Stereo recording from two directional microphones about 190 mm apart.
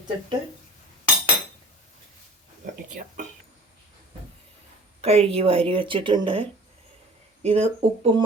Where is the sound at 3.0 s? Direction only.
45° right (ahead or behind).